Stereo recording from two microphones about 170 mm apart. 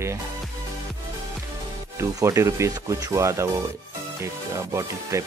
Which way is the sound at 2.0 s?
15° right (ahead or behind).